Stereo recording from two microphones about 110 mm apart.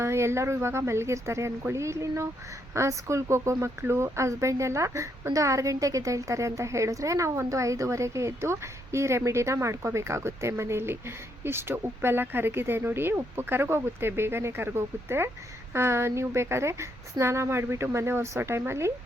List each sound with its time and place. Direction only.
0.0 s speech: 25° right (ahead or behind)